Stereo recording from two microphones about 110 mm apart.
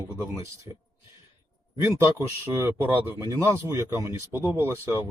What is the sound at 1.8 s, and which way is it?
Speech, 25° right (ahead or behind).